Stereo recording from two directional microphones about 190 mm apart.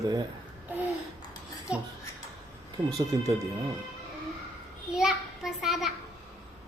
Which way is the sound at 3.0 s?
25° right (ahead or behind).